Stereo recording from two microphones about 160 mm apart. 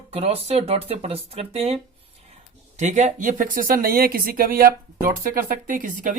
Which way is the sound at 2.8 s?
45° right (ahead or behind).